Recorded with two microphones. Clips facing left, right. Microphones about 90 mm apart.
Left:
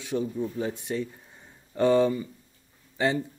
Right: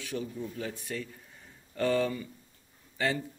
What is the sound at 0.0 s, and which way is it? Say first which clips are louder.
Speech: left 7 dB; 20° left (ahead or behind).